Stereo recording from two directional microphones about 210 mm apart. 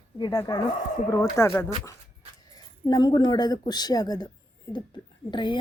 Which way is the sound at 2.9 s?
20° left (ahead or behind).